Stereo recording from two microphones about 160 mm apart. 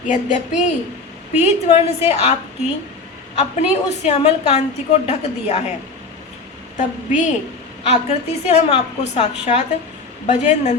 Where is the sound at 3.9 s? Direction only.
45° left (ahead or behind).